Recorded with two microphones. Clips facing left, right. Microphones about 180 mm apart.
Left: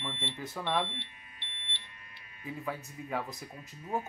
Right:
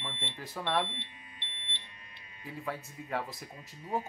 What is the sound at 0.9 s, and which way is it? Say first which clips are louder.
Smoke detector: even; 20° right (ahead or behind).